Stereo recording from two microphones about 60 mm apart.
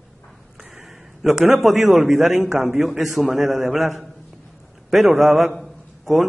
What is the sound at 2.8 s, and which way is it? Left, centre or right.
A man's voice, centre.